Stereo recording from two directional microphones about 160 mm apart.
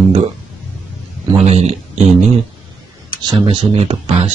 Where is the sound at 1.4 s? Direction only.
40° right (ahead or behind).